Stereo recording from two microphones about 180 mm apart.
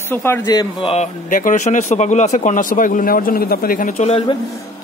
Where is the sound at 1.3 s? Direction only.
45° left (ahead or behind).